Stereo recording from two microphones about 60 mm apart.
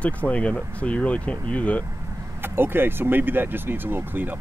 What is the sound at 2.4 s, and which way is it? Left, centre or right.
Speech, right.